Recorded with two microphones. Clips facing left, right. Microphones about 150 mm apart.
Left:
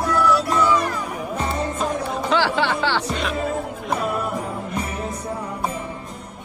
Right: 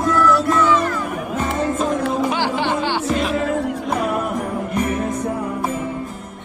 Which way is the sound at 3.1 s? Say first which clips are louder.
Right 6 dB; centre (ahead or behind).